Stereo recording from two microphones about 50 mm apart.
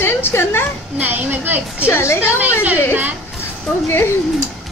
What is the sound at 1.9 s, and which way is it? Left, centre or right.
Speech, left.